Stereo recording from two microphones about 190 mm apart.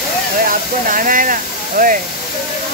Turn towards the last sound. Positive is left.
turn(degrees=-45)  # may be behind; listen again after turning